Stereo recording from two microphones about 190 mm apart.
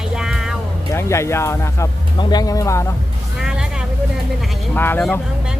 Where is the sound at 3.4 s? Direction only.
5° right (ahead or behind).